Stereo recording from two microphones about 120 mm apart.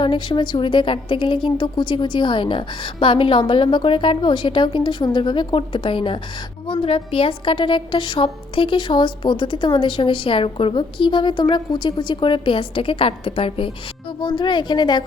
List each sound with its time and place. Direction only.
0.0 s a woman's voice: 40° left (ahead or behind)